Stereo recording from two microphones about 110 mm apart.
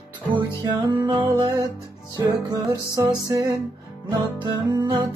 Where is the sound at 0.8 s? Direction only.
40° right (ahead or behind).